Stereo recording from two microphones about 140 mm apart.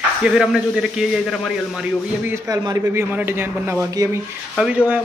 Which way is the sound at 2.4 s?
25° right (ahead or behind).